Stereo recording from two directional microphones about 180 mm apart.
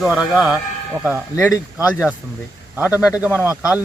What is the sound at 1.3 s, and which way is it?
Speech, 15° left (ahead or behind).